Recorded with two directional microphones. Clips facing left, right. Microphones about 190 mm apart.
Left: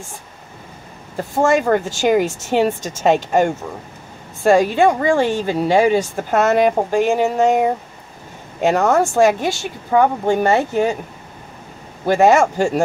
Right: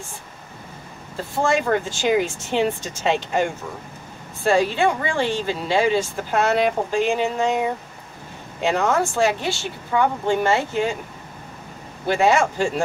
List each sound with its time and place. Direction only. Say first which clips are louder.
1.3 s a woman's voice: left 5 dB; 45° left (ahead or behind)
12.1 s a woman's voice: left 5 dB; 45° left (ahead or behind)